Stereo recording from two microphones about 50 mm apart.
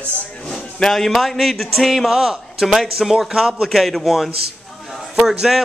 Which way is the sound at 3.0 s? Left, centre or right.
Centre.